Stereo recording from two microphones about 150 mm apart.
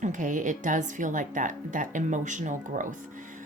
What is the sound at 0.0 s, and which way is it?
Speech, 55° right (ahead or behind).